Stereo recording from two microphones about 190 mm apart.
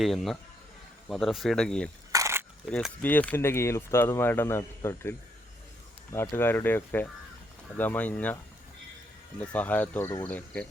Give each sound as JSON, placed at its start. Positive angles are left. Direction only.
{"t": 0.0, "sound": "speech", "side_deg": 0}
{"t": 2.1, "sound": "a sound", "side_deg": -15}
{"t": 2.6, "sound": "speech", "side_deg": 5}
{"t": 6.1, "sound": "speech", "side_deg": 10}
{"t": 9.4, "sound": "speech", "side_deg": 10}